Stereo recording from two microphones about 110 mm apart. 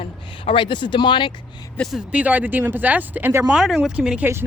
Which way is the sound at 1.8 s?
Centre (ahead or behind).